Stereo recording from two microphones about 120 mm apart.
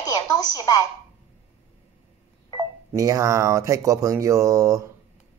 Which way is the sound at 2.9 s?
30° right (ahead or behind).